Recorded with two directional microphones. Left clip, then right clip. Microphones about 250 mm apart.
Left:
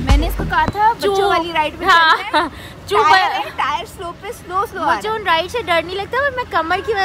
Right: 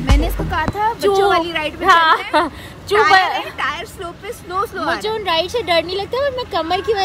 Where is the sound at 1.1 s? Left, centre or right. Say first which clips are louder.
Even; centre.